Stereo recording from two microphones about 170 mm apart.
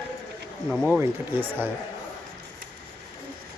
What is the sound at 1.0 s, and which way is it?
Speech, 10° right (ahead or behind).